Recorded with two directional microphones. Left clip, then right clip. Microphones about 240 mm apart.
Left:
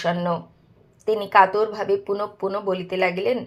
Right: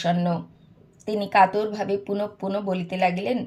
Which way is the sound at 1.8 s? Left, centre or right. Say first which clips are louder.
Left 4 dB; left.